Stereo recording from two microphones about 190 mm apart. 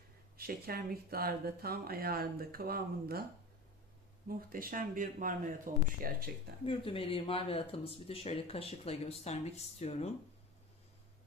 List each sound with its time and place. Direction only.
0.3 s speech: 50° right (ahead or behind)
4.3 s speech: 50° right (ahead or behind)
6.7 s speech: 30° left (ahead or behind)